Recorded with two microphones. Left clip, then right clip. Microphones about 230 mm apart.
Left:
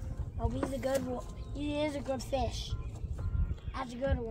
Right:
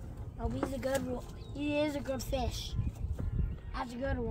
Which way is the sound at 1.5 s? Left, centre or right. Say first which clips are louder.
Right 1 dB; centre.